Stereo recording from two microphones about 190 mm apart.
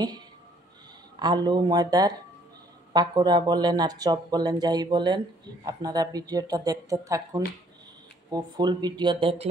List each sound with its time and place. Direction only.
1.2 s speech: 20° right (ahead or behind)